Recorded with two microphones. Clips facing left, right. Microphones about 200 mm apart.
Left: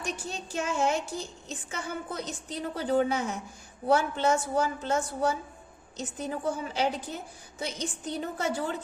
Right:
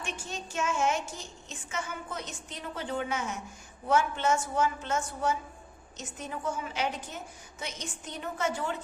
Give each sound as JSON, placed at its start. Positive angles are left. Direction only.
{"t": 0.0, "sound": "a woman's voice", "side_deg": 35}